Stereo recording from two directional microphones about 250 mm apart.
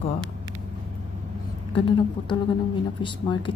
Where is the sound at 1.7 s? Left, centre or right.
Centre.